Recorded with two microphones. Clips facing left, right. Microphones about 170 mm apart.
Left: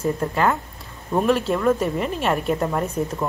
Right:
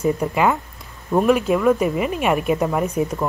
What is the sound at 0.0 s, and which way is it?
A woman's voice, 15° right (ahead or behind).